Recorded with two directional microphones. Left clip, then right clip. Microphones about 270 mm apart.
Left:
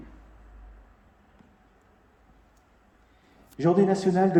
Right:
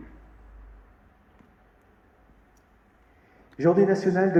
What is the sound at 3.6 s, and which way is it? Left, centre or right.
Speech, left.